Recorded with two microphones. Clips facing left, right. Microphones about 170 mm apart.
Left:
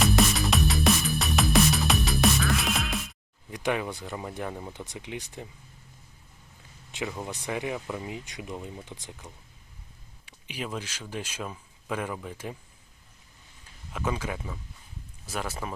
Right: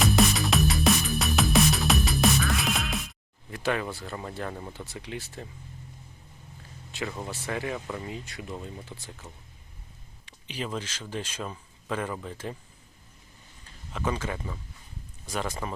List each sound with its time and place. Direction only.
0.0 s music: centre (ahead or behind)
3.5 s speech: 15° left (ahead or behind)
7.3 s speech: 15° left (ahead or behind)
13.9 s speech: 5° left (ahead or behind)